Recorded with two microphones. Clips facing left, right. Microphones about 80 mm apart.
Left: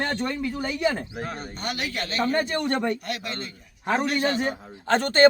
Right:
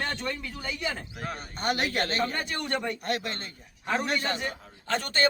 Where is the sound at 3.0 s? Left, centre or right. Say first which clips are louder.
Right 1 dB; right.